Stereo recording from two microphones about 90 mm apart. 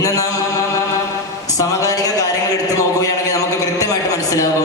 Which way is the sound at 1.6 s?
40° left (ahead or behind).